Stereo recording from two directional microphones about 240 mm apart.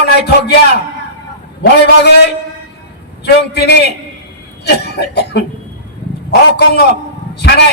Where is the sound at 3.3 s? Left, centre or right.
Left.